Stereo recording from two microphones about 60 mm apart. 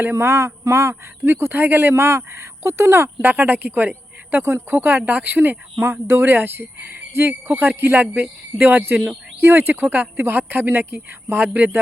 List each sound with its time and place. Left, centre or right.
0.0 s speech: right
3.2 s a woman's voice: right
5.8 s a woman's voice: right